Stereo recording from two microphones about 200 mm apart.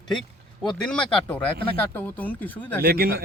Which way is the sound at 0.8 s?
5° left (ahead or behind).